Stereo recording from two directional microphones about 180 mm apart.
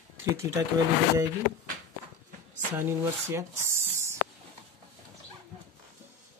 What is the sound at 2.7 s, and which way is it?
Speech, 15° right (ahead or behind).